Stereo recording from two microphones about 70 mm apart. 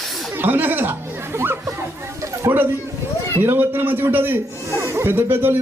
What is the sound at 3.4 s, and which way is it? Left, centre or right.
A man's voice, right.